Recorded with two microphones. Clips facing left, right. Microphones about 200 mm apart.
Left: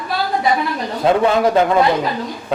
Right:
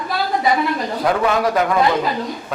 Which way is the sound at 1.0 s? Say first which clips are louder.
Left 4 dB; 25° left (ahead or behind).